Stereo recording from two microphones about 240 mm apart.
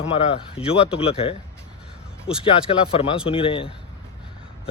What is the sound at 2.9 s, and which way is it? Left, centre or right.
Speech, left.